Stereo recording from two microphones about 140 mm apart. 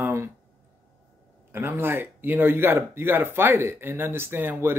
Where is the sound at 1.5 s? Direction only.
15° right (ahead or behind).